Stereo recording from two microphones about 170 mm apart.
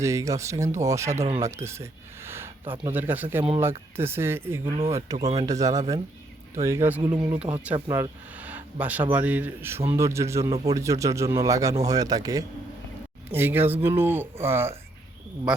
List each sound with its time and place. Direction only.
0.0 s a man's voice: 20° right (ahead or behind)